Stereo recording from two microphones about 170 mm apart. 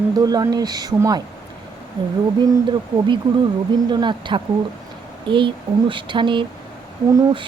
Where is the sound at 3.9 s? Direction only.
25° right (ahead or behind).